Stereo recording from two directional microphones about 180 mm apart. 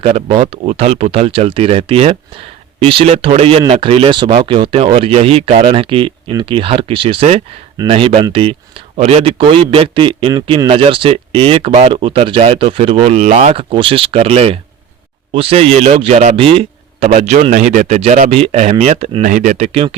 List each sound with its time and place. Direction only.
0.0 s a man's voice: 35° right (ahead or behind)
19.3 s a man's voice: 45° right (ahead or behind)